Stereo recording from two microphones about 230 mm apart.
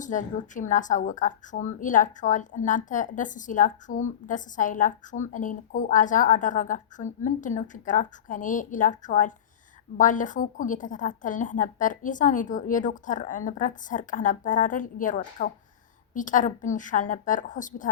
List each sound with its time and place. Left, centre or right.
0.0 s a woman's voice: left